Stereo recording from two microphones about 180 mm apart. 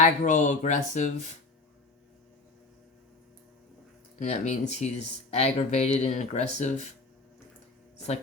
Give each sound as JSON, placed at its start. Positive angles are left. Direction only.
{"t": 0.0, "sound": "speech", "side_deg": 45}
{"t": 4.2, "sound": "speech", "side_deg": 40}